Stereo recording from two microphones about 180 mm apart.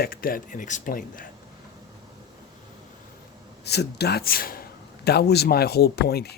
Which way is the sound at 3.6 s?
65° left (ahead or behind).